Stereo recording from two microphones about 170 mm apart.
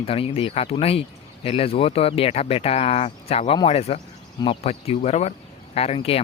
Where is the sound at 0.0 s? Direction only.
35° left (ahead or behind).